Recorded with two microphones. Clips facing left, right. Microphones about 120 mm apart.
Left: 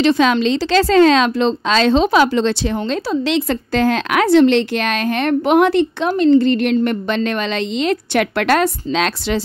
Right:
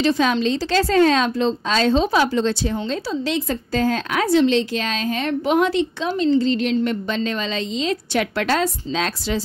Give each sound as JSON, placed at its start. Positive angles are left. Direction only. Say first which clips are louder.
{"t": 0.0, "sound": "a woman's voice", "louder": "left 4 dB", "side_deg": 85}